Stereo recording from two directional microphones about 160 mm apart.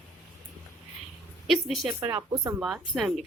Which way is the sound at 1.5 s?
Centre (ahead or behind).